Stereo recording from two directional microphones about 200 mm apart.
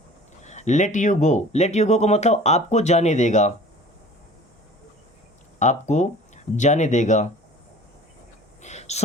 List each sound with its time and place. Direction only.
0.4 s speech: 35° left (ahead or behind)
5.5 s speech: 35° left (ahead or behind)
8.6 s a sound: 35° left (ahead or behind)